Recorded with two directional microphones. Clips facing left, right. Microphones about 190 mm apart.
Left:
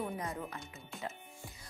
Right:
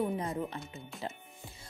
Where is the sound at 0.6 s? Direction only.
Centre (ahead or behind).